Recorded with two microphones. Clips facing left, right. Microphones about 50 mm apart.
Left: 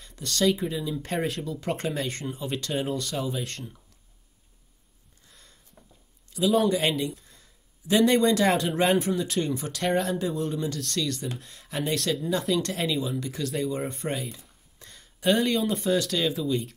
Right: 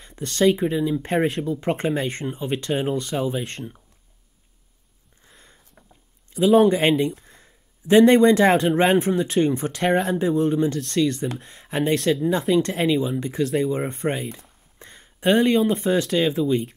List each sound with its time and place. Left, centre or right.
0.0 s speech: right
5.2 s a sound: right
6.3 s speech: right